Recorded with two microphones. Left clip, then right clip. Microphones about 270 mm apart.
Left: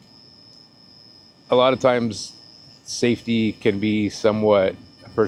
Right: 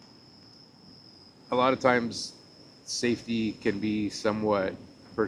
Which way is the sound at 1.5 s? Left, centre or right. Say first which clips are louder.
Left 7 dB; left.